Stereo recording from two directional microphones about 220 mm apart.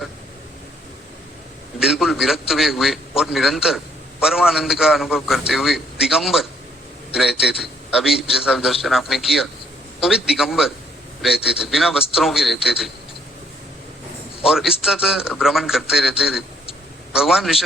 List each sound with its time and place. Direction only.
1.8 s a man's voice: centre (ahead or behind)
14.4 s a man's voice: centre (ahead or behind)